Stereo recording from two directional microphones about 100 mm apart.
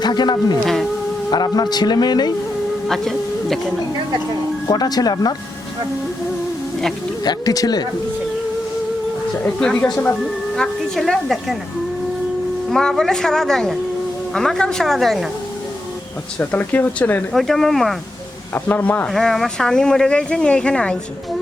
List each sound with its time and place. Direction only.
0.0 s speech: 45° left (ahead or behind)
0.6 s speech: 5° left (ahead or behind)
1.3 s speech: 45° left (ahead or behind)
2.8 s speech: 5° left (ahead or behind)
4.7 s speech: 40° left (ahead or behind)
7.3 s speech: 40° left (ahead or behind)
9.4 s speech: 10° left (ahead or behind)
12.7 s speech: 5° left (ahead or behind)
16.4 s speech: 20° left (ahead or behind)
17.3 s speech: 5° left (ahead or behind)
18.5 s speech: 15° left (ahead or behind)
19.1 s speech: centre (ahead or behind)